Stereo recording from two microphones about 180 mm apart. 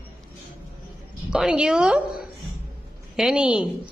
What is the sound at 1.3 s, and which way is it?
A woman's voice, 5° right (ahead or behind).